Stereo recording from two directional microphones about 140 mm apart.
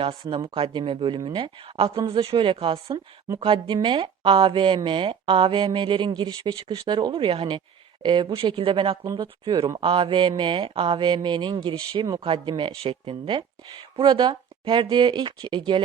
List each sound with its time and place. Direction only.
0.0 s speech: 40° right (ahead or behind)
1.7 s speech: 45° right (ahead or behind)
2.9 s speech: 25° right (ahead or behind)
9.8 s speech: 40° right (ahead or behind)